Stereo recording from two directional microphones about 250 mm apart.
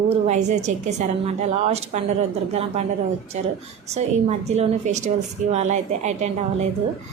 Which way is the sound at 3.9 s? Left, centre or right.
Right.